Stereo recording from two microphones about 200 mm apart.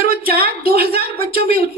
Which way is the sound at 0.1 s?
50° right (ahead or behind).